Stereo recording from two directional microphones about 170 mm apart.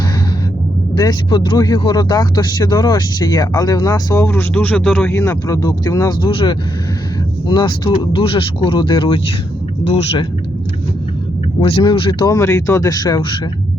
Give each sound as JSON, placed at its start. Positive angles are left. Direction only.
{"t": 0.9, "sound": "speech", "side_deg": 25}
{"t": 4.2, "sound": "speech", "side_deg": 10}
{"t": 11.6, "sound": "speech", "side_deg": 30}
{"t": 12.3, "sound": "speech", "side_deg": 15}